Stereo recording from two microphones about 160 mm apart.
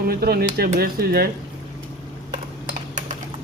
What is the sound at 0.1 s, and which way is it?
Speech, 70° right (ahead or behind).